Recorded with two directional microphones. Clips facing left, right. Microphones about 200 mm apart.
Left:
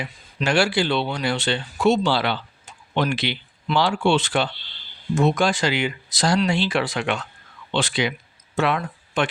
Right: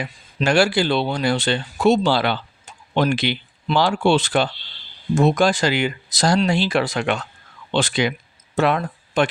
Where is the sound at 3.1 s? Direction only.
45° right (ahead or behind).